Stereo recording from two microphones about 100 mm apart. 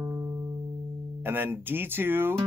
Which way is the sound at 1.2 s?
20° right (ahead or behind).